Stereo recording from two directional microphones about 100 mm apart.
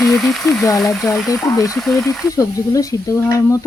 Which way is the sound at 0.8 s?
35° left (ahead or behind).